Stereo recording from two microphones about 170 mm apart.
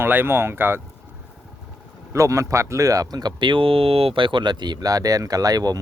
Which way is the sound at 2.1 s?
20° right (ahead or behind).